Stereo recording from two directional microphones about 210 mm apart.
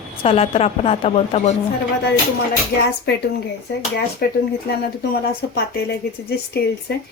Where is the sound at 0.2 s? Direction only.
25° left (ahead or behind).